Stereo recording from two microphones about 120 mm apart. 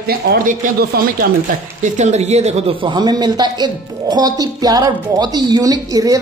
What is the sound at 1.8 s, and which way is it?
Speech, 75° right (ahead or behind).